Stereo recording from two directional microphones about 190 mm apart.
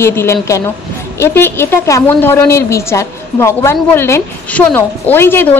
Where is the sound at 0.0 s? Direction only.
15° left (ahead or behind).